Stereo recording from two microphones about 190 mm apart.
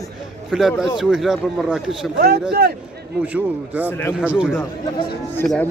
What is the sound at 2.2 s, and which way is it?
Speech, 55° right (ahead or behind).